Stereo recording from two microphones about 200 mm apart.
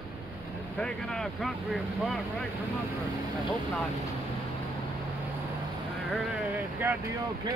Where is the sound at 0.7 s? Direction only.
Centre (ahead or behind).